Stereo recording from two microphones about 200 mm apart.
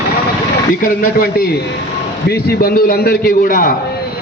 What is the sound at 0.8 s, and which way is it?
A man's voice, 45° left (ahead or behind).